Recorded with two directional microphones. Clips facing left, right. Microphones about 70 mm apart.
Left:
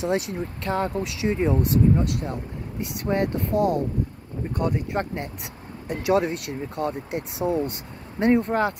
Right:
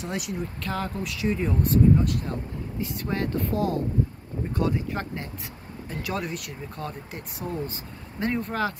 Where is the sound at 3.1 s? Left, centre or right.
Centre.